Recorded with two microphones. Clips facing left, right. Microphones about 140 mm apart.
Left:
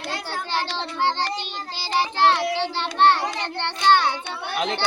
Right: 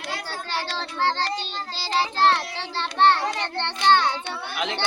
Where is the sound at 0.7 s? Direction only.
15° left (ahead or behind).